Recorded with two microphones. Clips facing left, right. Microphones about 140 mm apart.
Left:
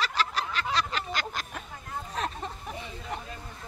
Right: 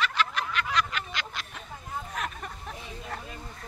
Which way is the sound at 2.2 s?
30° left (ahead or behind).